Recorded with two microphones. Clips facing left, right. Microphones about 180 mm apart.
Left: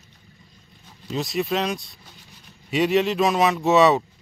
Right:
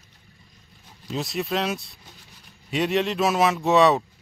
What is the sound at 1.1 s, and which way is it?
Speech, centre (ahead or behind).